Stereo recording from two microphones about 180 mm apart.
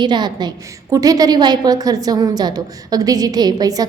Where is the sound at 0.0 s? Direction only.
25° right (ahead or behind).